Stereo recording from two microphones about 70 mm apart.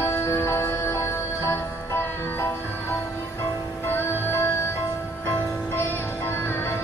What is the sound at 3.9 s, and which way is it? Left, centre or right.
Music, left.